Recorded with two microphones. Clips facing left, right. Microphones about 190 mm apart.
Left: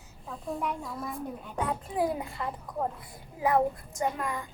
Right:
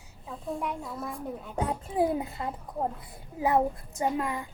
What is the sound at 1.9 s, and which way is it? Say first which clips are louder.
Speech: right 4 dB; 25° right (ahead or behind).